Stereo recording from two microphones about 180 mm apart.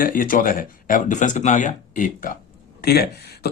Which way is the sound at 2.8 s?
60° left (ahead or behind).